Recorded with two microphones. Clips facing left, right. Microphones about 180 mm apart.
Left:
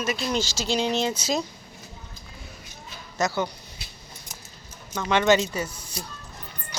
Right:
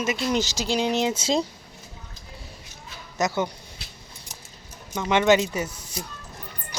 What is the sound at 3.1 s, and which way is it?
Speech, 20° right (ahead or behind).